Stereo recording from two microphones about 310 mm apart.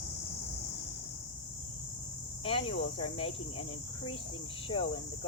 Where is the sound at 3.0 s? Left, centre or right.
Centre.